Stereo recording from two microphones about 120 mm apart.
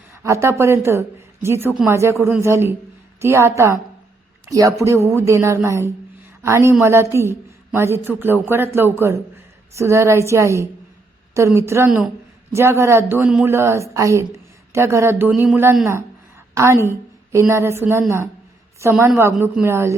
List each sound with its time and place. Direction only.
0.1 s a woman's voice: 25° right (ahead or behind)